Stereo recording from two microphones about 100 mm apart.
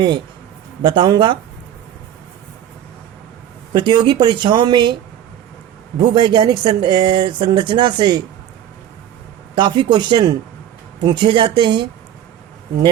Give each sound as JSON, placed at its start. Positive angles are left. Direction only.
{"t": 0.8, "sound": "speech", "side_deg": -50}
{"t": 3.7, "sound": "speech", "side_deg": -50}
{"t": 6.0, "sound": "speech", "side_deg": -50}
{"t": 9.6, "sound": "speech", "side_deg": -50}